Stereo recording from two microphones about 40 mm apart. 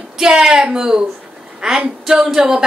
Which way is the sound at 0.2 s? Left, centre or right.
Centre.